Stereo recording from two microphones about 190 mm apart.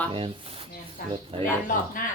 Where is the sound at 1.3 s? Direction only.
30° right (ahead or behind).